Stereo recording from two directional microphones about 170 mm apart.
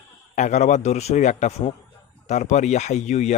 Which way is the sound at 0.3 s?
45° left (ahead or behind).